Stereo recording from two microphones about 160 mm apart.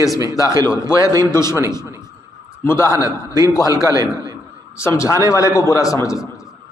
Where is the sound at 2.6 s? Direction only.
15° left (ahead or behind).